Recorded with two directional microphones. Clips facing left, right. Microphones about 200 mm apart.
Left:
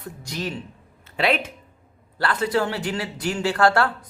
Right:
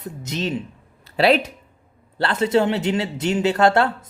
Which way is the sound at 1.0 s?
35° right (ahead or behind).